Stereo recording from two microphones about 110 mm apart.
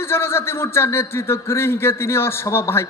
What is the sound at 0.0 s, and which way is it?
Speech, 25° left (ahead or behind).